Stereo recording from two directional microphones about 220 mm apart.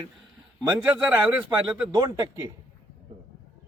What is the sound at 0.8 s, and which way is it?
A man's voice, 10° right (ahead or behind).